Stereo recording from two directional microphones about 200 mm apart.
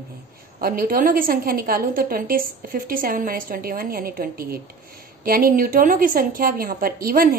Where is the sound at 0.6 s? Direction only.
45° right (ahead or behind).